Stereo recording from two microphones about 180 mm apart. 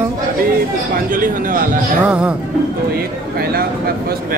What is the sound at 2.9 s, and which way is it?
Speech, 60° right (ahead or behind).